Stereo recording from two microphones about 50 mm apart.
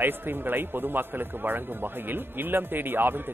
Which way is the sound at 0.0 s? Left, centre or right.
Right.